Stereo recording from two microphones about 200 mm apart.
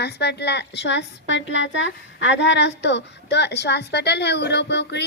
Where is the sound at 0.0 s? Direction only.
55° left (ahead or behind).